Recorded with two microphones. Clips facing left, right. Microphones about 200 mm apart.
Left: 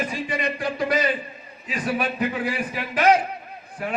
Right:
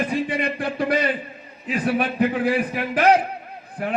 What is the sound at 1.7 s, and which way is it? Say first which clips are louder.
A man's voice: right 3 dB; 55° right (ahead or behind).